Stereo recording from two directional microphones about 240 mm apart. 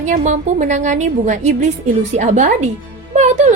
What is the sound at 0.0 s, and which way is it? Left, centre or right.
A woman's voice, right.